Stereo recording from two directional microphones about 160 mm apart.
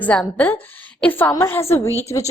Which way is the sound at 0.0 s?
10° left (ahead or behind).